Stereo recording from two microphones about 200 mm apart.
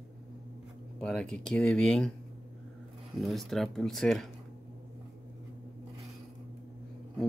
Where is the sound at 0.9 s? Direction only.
5° left (ahead or behind).